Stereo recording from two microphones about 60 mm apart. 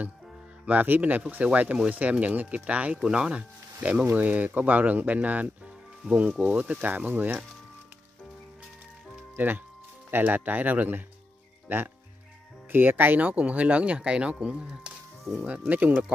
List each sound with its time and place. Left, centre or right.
0.7 s speech: right
10.1 s speech: right
12.7 s speech: right